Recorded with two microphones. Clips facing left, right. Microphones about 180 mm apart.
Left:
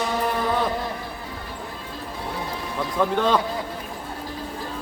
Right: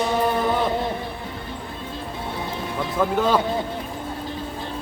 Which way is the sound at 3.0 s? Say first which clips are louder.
Right 1 dB; 5° right (ahead or behind).